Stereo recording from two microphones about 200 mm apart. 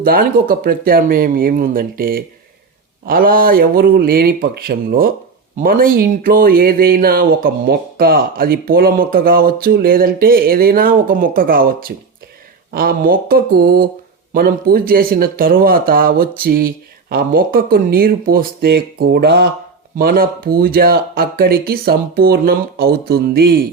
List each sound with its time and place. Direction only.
0.0 s speech: 45° right (ahead or behind)